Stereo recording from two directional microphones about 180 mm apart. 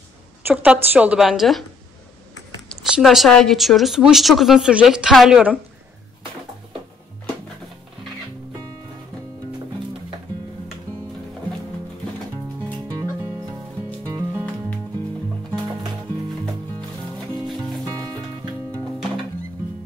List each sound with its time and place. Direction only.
0.5 s speech: 10° right (ahead or behind)
2.7 s speech: centre (ahead or behind)
14.0 s music: 20° right (ahead or behind)
17.8 s music: 20° right (ahead or behind)